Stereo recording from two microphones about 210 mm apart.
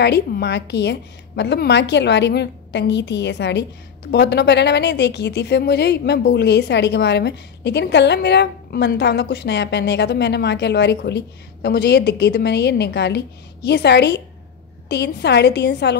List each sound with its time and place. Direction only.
0.0 s a woman's voice: 50° left (ahead or behind)